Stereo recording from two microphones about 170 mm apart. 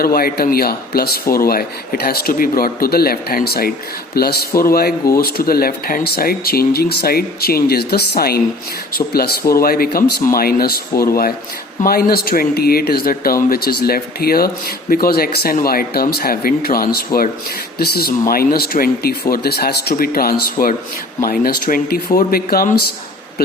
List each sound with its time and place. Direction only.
0.0 s speech: 60° left (ahead or behind)